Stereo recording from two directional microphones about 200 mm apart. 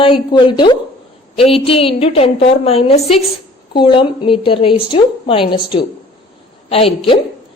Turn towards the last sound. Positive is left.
turn(degrees=30)  # may be behind; listen again after turning